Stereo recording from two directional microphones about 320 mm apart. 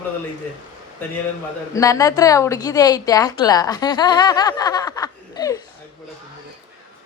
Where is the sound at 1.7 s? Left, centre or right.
Centre.